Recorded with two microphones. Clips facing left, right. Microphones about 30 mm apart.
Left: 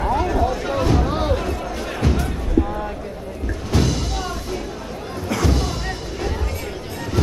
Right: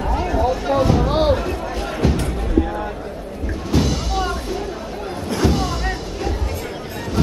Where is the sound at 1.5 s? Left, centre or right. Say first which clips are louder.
Right 1 dB; right.